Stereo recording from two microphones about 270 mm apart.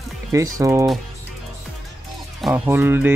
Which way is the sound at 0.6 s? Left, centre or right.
Centre.